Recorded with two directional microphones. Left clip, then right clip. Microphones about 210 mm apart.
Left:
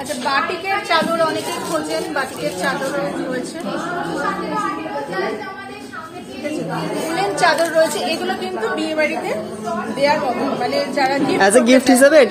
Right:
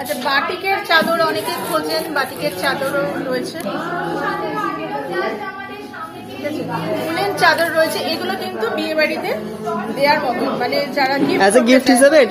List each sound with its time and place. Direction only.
0.3 s a woman's voice: 15° right (ahead or behind)
7.2 s a woman's voice: 10° right (ahead or behind)
8.7 s speech: 20° right (ahead or behind)
10.0 s a woman's voice: 10° right (ahead or behind)